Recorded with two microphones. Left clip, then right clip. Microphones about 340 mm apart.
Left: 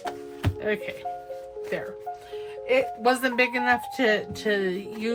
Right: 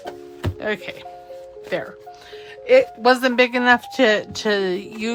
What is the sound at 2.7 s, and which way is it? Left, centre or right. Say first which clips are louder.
Speech: right 8 dB; centre.